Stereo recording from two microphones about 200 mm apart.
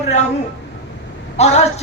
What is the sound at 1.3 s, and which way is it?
Speech, 35° left (ahead or behind).